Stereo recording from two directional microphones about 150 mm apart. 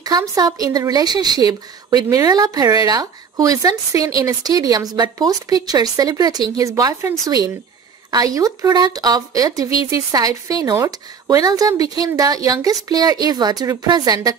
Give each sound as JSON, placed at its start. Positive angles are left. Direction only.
{"t": 0.0, "sound": "speech", "side_deg": -25}